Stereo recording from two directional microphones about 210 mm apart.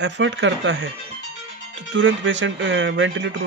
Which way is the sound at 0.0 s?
60° right (ahead or behind).